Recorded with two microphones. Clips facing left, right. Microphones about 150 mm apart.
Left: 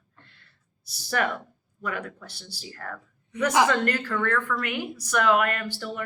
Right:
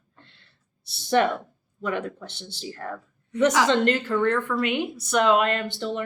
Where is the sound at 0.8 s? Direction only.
25° right (ahead or behind).